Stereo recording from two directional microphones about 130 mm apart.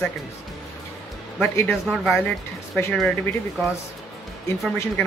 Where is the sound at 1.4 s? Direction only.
15° left (ahead or behind).